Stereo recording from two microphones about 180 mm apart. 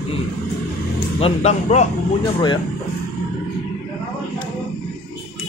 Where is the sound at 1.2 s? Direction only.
35° left (ahead or behind).